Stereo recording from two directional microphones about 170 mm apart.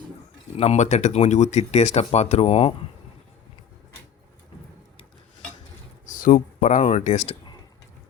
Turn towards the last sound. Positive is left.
turn(degrees=40)  # may be behind; listen again after turning